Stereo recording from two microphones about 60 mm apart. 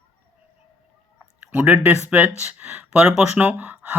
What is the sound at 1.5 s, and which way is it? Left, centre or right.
Speech, right.